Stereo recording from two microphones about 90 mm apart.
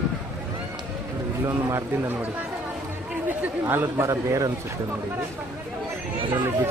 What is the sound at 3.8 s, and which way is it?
Speech, 35° right (ahead or behind).